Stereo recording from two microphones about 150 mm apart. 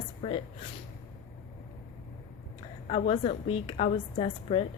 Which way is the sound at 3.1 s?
35° left (ahead or behind).